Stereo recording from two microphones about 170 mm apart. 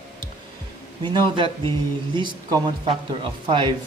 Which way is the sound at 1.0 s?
30° right (ahead or behind).